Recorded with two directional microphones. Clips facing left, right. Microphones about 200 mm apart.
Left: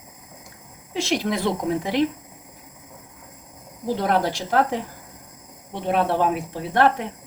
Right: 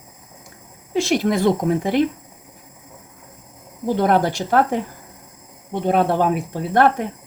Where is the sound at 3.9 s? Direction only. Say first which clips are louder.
Right 5 dB; 55° right (ahead or behind).